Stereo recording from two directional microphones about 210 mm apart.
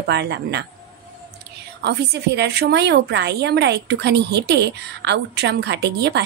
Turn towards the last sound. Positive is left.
turn(degrees=-55)  # may be behind; listen again after turning